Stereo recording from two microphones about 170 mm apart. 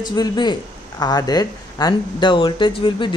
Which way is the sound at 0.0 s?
25° left (ahead or behind).